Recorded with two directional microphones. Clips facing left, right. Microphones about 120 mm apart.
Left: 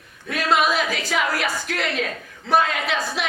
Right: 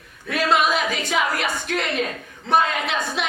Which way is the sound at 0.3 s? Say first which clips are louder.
Right 1 dB; centre (ahead or behind).